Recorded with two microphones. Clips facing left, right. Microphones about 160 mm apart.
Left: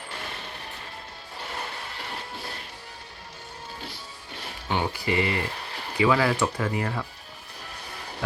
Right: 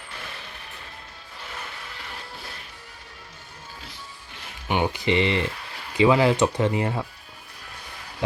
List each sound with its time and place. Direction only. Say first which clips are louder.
1.4 s vehicle: left 3 dB; 35° left (ahead or behind)
4.7 s speech: right 4 dB; 20° right (ahead or behind)